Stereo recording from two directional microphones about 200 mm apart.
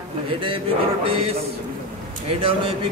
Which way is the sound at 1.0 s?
25° right (ahead or behind).